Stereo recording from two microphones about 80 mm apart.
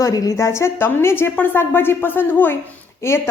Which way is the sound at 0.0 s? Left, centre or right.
Left.